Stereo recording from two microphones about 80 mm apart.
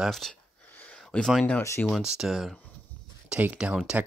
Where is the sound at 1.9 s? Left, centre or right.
Centre.